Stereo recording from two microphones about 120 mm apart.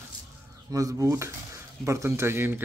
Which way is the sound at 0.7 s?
30° right (ahead or behind).